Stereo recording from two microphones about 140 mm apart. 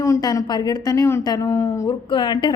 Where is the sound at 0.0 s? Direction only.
25° left (ahead or behind).